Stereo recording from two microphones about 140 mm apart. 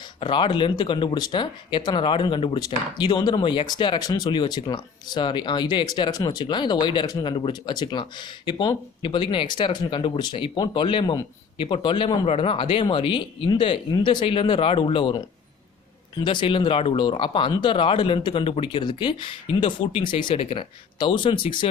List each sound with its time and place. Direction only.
0.2 s speech: 35° left (ahead or behind)